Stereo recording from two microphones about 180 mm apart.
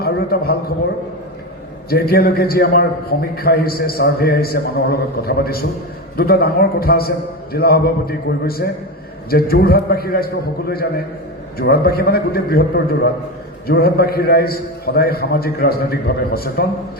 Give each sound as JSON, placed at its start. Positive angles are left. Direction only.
{"t": 0.0, "sound": "a man's voice", "side_deg": 60}
{"t": 1.9, "sound": "a man's voice", "side_deg": 60}